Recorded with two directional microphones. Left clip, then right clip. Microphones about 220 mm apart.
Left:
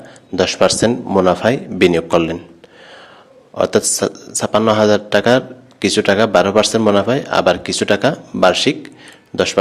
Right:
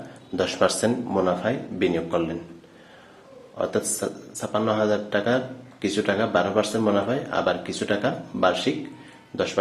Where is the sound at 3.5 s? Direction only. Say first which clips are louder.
Left 11 dB; 45° left (ahead or behind).